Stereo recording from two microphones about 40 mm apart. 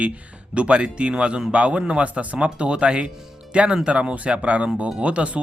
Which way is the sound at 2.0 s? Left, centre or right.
Right.